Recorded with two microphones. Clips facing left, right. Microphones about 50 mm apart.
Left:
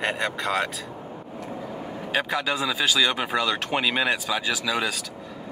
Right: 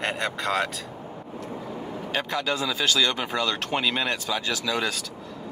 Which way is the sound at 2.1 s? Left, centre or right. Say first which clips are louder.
Left 2 dB; centre.